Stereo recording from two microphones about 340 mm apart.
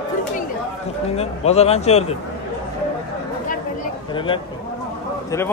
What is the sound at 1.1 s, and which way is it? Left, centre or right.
Speech, centre.